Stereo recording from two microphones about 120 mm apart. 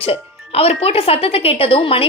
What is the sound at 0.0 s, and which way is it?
Speech, 55° left (ahead or behind).